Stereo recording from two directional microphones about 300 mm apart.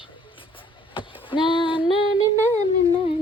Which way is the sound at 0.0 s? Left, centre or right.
Centre.